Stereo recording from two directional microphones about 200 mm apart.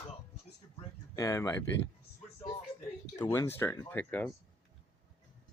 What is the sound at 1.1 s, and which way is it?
Speech, 15° left (ahead or behind).